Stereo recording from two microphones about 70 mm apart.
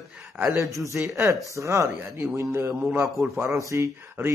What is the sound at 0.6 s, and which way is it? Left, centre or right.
Speech, right.